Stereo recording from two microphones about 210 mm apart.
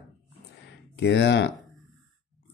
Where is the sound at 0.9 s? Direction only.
55° left (ahead or behind).